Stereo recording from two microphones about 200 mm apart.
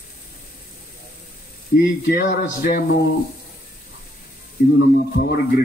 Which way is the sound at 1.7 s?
55° left (ahead or behind).